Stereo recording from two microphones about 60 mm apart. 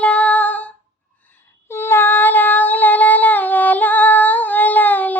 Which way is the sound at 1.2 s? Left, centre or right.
Left.